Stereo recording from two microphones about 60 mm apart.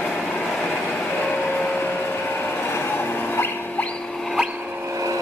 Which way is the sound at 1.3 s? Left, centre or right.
Left.